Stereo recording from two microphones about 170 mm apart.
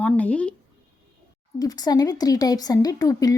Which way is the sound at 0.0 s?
5° left (ahead or behind).